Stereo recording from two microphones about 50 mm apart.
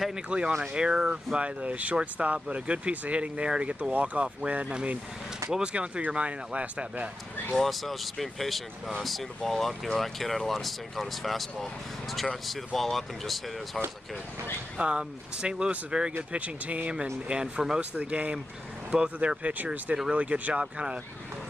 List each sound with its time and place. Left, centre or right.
0.1 s speech: right
1.6 s speech: right
7.5 s speech: centre
14.8 s speech: right
16.3 s speech: right
17.0 s speech: centre
17.7 s speech: right